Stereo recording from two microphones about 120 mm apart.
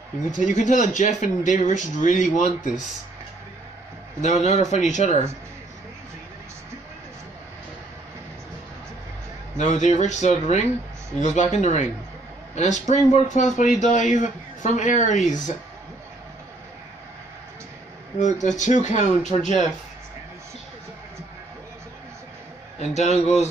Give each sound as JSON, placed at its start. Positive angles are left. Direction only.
{"t": 0.5, "sound": "a man's voice", "side_deg": 90}
{"t": 4.2, "sound": "speech", "side_deg": 70}
{"t": 9.6, "sound": "a man's voice", "side_deg": 75}
{"t": 18.2, "sound": "speech", "side_deg": 90}
{"t": 22.8, "sound": "speech", "side_deg": 65}